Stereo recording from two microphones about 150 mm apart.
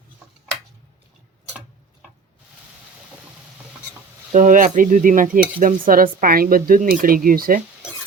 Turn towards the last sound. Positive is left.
turn(degrees=-70)  # may be behind; listen again after turning